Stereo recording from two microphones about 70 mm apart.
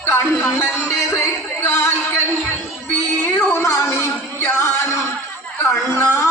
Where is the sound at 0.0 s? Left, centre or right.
Left.